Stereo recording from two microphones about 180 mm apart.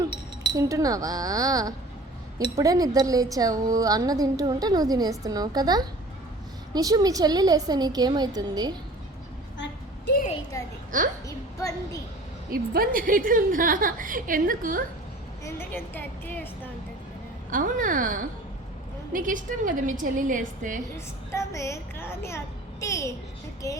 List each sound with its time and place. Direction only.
0.5 s a woman's voice: 20° right (ahead or behind)
10.5 s a sound: 15° left (ahead or behind)
10.9 s a woman's voice: 45° right (ahead or behind)
12.5 s a woman's voice: 55° right (ahead or behind)
15.4 s a woman's voice: 10° left (ahead or behind)
17.5 s a woman's voice: 50° right (ahead or behind)
20.9 s a woman's voice: 15° left (ahead or behind)